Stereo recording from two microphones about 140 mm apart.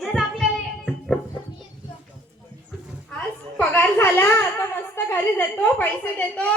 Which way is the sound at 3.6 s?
10° left (ahead or behind).